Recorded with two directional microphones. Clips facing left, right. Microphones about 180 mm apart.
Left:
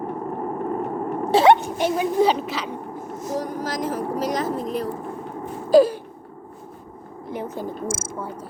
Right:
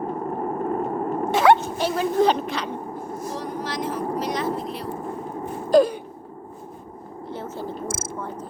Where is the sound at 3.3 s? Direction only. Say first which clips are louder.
Left 5 dB; 45° left (ahead or behind).